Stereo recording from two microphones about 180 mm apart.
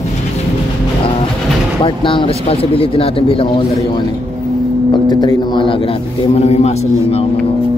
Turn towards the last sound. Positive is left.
turn(degrees=35)  # may be behind; listen again after turning